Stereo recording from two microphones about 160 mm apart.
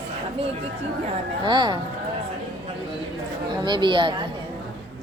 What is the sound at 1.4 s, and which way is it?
Speech, 30° right (ahead or behind).